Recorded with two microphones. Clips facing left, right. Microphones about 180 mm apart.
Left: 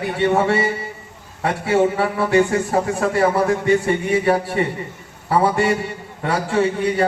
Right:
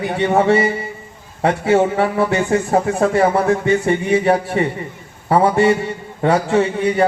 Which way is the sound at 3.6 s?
20° right (ahead or behind).